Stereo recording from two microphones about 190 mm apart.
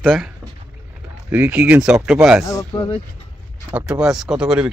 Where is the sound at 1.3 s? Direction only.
5° right (ahead or behind).